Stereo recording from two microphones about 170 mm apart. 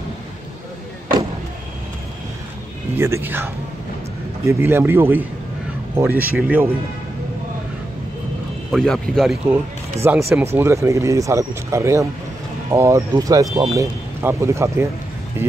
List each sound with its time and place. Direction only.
3.0 s speech: 15° right (ahead or behind)
8.7 s speech: 5° left (ahead or behind)
10.3 s speech: 15° right (ahead or behind)